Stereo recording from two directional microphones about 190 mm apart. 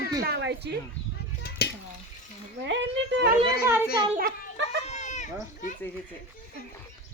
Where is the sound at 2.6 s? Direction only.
70° right (ahead or behind).